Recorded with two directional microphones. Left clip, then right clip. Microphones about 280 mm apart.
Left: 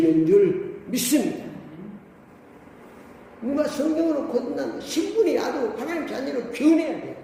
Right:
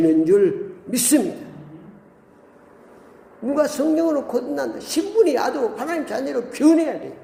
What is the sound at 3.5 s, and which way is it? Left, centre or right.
A man's voice, right.